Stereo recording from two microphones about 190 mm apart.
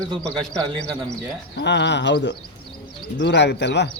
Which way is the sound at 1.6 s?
65° left (ahead or behind).